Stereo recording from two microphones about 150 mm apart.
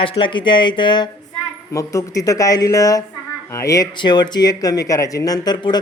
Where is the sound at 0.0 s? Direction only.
35° left (ahead or behind).